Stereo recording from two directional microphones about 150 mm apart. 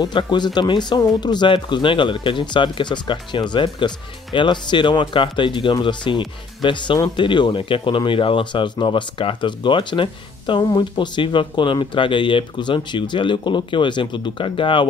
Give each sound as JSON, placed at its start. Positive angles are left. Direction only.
{"t": 0.0, "sound": "speech", "side_deg": 30}